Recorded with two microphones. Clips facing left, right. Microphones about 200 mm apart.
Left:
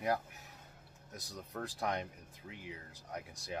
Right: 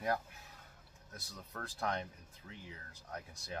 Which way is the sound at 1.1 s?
15° left (ahead or behind).